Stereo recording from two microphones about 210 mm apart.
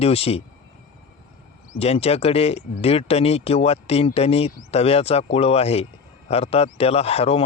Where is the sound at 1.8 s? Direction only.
30° left (ahead or behind).